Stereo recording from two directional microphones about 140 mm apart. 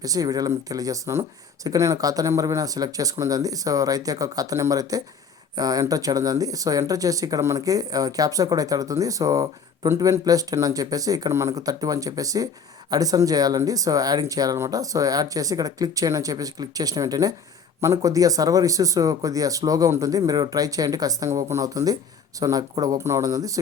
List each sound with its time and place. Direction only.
0.0 s speech: 25° right (ahead or behind)